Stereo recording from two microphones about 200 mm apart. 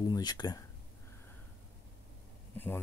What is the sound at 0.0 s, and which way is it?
Speech, 20° left (ahead or behind).